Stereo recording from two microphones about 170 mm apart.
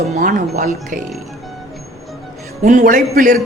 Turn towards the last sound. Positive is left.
turn(degrees=-55)  # may be behind; listen again after turning